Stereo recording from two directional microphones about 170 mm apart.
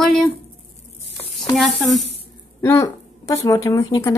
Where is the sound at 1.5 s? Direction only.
Centre (ahead or behind).